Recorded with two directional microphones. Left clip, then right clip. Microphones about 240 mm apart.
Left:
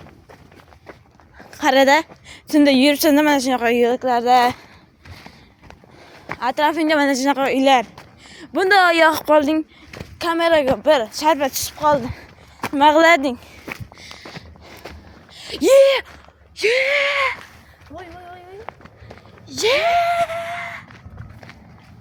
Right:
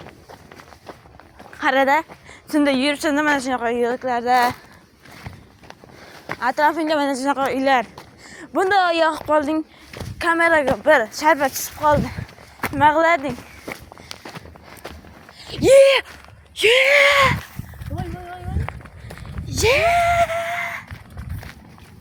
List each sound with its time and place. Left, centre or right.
1.5 s a woman's voice: left
6.4 s speech: centre
8.5 s speech: centre
10.2 s speech: centre
12.7 s speech: left
13.0 s speech: left
14.1 s a sound: right
15.4 s a sound: left
15.6 s speech: centre
16.6 s a sound: centre
18.7 s run: right
19.0 s livestock: right
19.5 s a sound: centre